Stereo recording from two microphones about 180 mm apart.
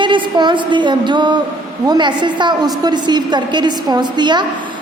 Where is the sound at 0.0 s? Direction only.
25° right (ahead or behind).